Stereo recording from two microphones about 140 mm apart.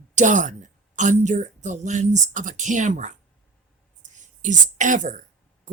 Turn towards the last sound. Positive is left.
turn(degrees=-65)  # may be behind; listen again after turning